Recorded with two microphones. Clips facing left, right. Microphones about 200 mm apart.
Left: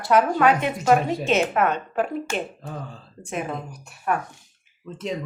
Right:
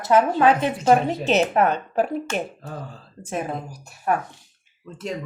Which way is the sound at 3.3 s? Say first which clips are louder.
Right 1 dB; 35° right (ahead or behind).